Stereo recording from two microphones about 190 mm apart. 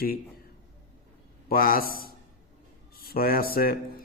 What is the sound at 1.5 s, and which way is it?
A man's voice, 50° left (ahead or behind).